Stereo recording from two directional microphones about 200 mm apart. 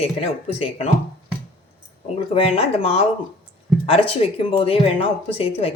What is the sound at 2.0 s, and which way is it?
Speech, 30° left (ahead or behind).